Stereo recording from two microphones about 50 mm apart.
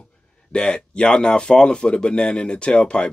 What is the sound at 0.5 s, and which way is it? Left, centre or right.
Speech, centre.